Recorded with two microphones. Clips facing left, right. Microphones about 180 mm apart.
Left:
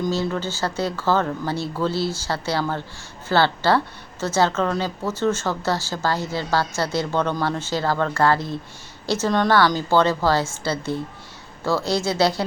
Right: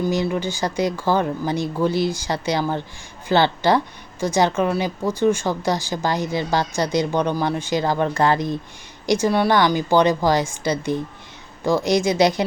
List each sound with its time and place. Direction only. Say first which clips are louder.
0.0 s speech: right 2 dB; 15° right (ahead or behind)